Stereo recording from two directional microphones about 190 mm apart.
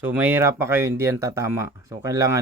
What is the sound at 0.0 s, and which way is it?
Speech, 10° right (ahead or behind).